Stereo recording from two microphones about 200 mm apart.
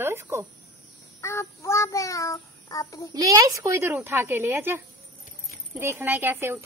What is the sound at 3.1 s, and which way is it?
Speech, 15° right (ahead or behind).